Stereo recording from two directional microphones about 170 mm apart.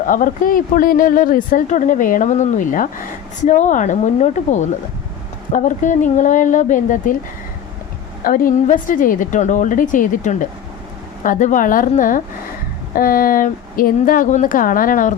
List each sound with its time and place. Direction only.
0.0 s speech: 50° left (ahead or behind)
8.2 s a woman's voice: 55° left (ahead or behind)